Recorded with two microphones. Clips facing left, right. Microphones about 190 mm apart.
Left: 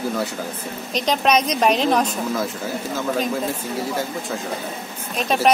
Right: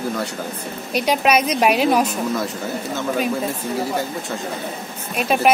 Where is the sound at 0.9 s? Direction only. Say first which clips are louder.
Right 1 dB; 10° right (ahead or behind).